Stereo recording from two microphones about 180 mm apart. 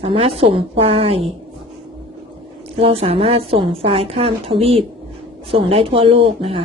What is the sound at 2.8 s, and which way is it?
Speech, 30° right (ahead or behind).